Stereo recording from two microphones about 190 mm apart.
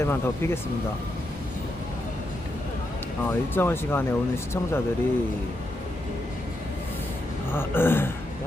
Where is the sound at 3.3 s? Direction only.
10° left (ahead or behind).